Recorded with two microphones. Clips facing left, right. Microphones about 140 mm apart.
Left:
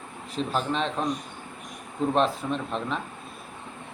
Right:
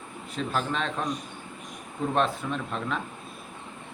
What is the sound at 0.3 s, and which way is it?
Speech, 30° left (ahead or behind).